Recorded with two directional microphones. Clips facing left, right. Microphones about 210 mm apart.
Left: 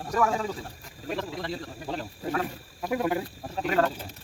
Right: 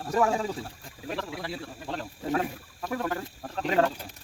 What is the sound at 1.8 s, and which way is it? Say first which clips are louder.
Speech: left 1 dB; 5° left (ahead or behind).